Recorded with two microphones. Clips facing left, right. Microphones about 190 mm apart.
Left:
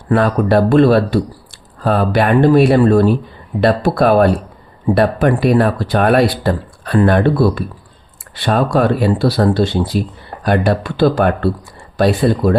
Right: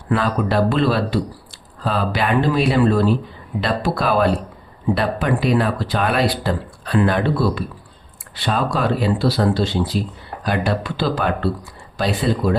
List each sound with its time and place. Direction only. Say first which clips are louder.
0.1 s speech: left 6 dB; 50° left (ahead or behind)